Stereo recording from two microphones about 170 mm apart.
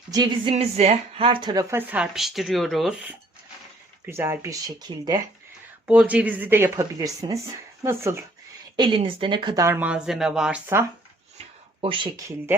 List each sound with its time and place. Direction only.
0.1 s speech: 25° right (ahead or behind)
1.7 s speech: 5° right (ahead or behind); by 5.2 s 25° right (ahead or behind)
5.9 s speech: 5° right (ahead or behind)
8.7 s speech: 25° right (ahead or behind)
9.6 s speech: 10° right (ahead or behind)
11.8 s speech: 30° right (ahead or behind)